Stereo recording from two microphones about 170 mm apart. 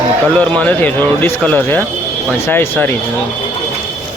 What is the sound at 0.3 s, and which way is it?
A man's voice, 10° left (ahead or behind).